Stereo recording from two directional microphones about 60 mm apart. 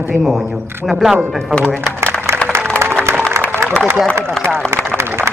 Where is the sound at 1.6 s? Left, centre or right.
Right.